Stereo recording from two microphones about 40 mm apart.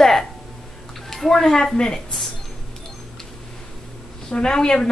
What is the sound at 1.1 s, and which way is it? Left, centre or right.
Speech, centre.